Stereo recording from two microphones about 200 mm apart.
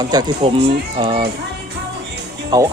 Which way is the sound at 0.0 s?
20° right (ahead or behind).